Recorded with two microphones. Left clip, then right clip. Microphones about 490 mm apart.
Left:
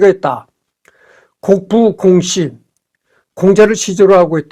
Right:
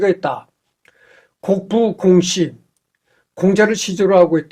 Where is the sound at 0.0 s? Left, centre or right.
Left.